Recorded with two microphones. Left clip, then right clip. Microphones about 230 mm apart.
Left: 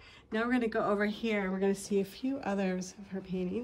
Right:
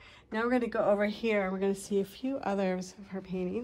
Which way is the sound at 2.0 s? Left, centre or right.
Centre.